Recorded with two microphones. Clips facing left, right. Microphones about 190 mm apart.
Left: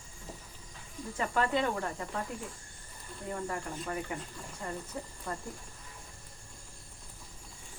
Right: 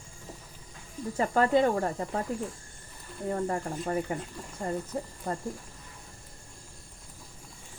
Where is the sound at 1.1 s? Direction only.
40° right (ahead or behind).